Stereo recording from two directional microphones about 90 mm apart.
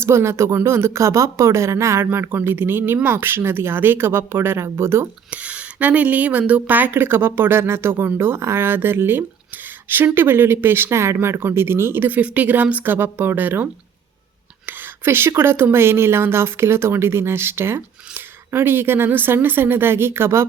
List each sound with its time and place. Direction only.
0.0 s speech: 30° right (ahead or behind)
5.3 s speech: 15° right (ahead or behind)
14.7 s speech: 25° right (ahead or behind)